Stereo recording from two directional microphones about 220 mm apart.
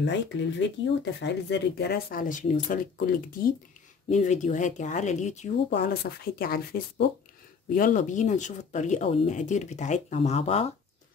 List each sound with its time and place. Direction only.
0.0 s speech: 55° left (ahead or behind); by 5.5 s 30° left (ahead or behind)
5.7 s speech: 45° left (ahead or behind); by 10.7 s 25° left (ahead or behind)